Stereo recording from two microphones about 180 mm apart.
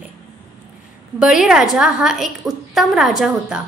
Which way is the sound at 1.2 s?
5° right (ahead or behind).